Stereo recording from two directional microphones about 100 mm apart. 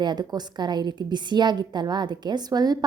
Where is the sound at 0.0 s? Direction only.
45° right (ahead or behind).